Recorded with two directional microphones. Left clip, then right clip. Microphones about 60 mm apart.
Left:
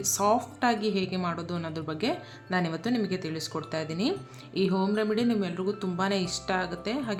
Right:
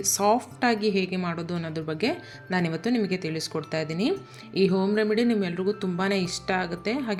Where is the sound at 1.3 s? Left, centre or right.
Right.